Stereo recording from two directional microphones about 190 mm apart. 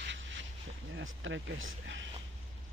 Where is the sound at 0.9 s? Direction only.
90° right; by 2.1 s 75° right (ahead or behind).